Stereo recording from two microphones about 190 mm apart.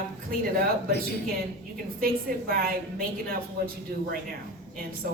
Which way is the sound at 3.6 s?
55° right (ahead or behind).